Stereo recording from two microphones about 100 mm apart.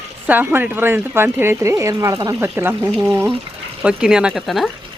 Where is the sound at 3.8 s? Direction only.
10° right (ahead or behind).